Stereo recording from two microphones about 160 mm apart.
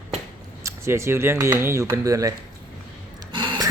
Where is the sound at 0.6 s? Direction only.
15° right (ahead or behind).